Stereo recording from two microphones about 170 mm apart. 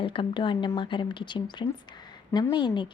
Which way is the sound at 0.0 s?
30° left (ahead or behind).